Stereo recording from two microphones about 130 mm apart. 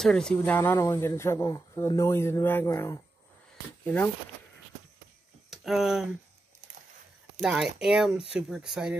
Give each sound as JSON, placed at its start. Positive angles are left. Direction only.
{"t": 0.0, "sound": "speech", "side_deg": 5}
{"t": 0.6, "sound": "speech", "side_deg": 15}
{"t": 5.5, "sound": "speech", "side_deg": 0}
{"t": 7.4, "sound": "speech", "side_deg": -5}